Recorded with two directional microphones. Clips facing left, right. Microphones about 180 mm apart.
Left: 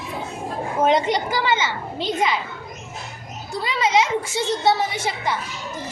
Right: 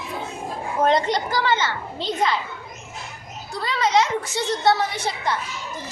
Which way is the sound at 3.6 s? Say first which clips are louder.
Even; 5° left (ahead or behind).